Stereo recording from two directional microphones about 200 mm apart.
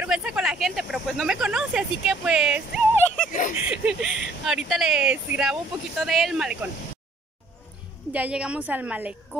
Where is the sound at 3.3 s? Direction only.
40° left (ahead or behind).